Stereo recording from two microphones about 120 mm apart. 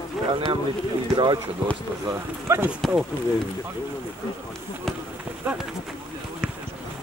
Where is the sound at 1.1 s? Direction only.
40° right (ahead or behind).